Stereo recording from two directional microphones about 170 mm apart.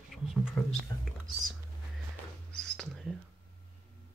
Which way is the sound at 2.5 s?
5° left (ahead or behind).